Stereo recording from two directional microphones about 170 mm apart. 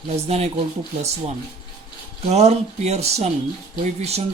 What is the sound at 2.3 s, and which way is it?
Speech, 40° right (ahead or behind).